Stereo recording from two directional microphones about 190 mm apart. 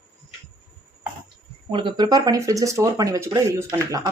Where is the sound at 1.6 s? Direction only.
25° right (ahead or behind).